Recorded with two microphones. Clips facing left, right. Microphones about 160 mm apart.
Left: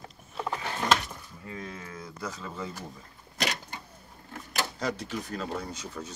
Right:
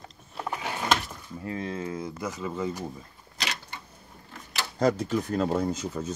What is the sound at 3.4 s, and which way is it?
Typewriter, 45° left (ahead or behind).